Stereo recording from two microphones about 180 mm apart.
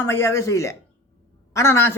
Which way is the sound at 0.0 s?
15° left (ahead or behind).